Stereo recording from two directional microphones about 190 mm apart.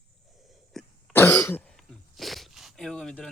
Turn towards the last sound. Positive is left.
turn(degrees=0)  # may be behind; listen again after turning